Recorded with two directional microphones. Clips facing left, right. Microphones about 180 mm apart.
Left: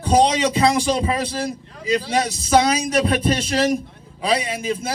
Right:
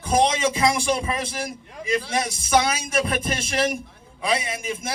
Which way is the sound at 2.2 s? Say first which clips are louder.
Left 4 dB; 30° left (ahead or behind).